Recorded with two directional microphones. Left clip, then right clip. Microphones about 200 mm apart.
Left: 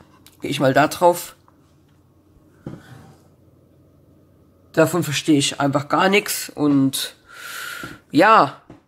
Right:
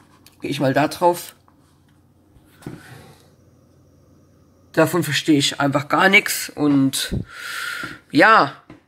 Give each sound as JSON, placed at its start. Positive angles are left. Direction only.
{"t": 0.2, "sound": "speech", "side_deg": 5}
{"t": 4.7, "sound": "speech", "side_deg": 5}